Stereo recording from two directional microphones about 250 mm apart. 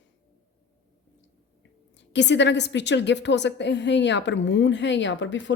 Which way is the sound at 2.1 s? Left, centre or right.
Left.